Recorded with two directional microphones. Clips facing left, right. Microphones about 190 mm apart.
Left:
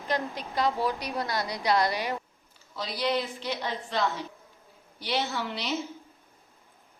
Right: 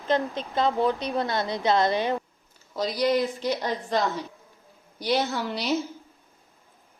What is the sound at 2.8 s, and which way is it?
Speech, 40° right (ahead or behind).